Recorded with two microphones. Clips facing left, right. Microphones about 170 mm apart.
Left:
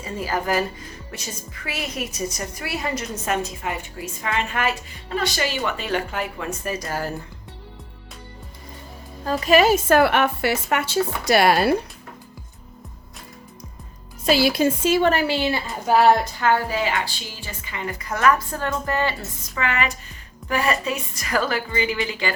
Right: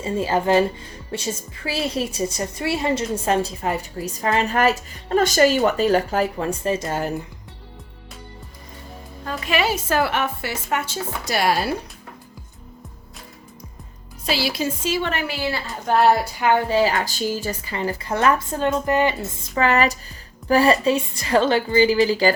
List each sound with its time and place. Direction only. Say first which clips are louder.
0.0 s a woman's voice: right 5 dB; 25° right (ahead or behind)
9.2 s a woman's voice: left 6 dB; 40° left (ahead or behind); by 11.7 s 60° left (ahead or behind)
14.3 s speech: left 5 dB; 50° left (ahead or behind)
15.1 s a woman's voice: left 4 dB; 25° left (ahead or behind)
15.9 s a woman's voice: left 1 dB; centre (ahead or behind)
16.4 s speech: right 2 dB; 20° right (ahead or behind)
16.7 s a woman's voice: right 5 dB; 35° right (ahead or behind); by 19.1 s 20° right (ahead or behind)
19.5 s a woman's voice: right 6 dB; 35° right (ahead or behind)